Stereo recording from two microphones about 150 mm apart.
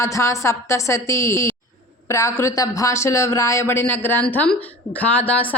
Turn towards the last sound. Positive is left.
turn(degrees=10)  # may be behind; listen again after turning